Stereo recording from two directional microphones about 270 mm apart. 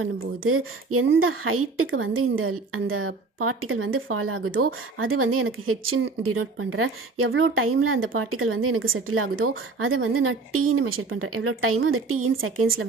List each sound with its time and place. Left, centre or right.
0.0 s a woman's voice: right